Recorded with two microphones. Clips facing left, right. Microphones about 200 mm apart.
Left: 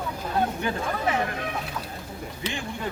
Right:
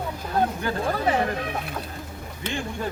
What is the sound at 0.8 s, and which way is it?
Speech, 35° right (ahead or behind).